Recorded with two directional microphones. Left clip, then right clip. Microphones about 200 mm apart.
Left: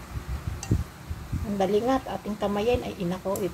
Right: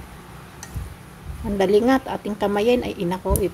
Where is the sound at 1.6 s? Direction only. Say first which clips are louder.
Right 6 dB; 45° right (ahead or behind).